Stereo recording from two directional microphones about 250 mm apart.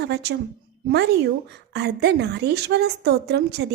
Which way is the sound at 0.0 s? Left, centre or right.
Right.